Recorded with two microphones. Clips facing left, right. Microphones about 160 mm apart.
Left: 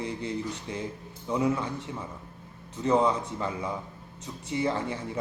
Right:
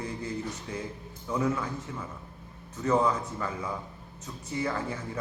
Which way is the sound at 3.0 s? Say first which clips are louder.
Left 2 dB; 25° left (ahead or behind).